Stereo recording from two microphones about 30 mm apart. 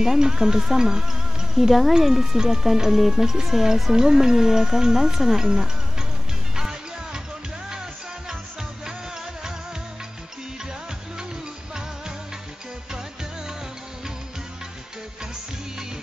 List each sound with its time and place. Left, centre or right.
0.0 s speech: centre
6.5 s music: right